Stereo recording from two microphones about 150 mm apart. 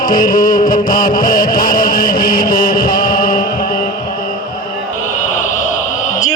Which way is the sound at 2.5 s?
70° left (ahead or behind).